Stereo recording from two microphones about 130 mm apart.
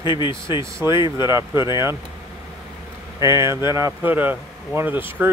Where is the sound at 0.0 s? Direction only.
35° left (ahead or behind).